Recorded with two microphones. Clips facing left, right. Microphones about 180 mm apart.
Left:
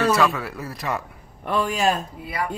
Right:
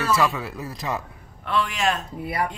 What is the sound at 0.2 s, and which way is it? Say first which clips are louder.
Speech: left 2 dB; 20° right (ahead or behind).